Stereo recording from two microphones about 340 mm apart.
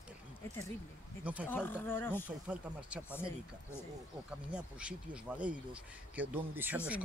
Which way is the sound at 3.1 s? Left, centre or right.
Centre.